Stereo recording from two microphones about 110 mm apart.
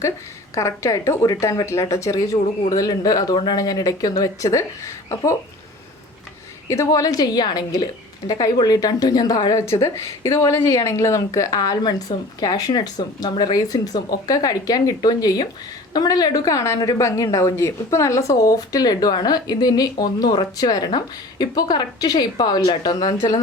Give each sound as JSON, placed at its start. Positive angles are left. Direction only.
{"t": 0.5, "sound": "a woman's voice", "side_deg": 30}
{"t": 6.7, "sound": "a woman's voice", "side_deg": 30}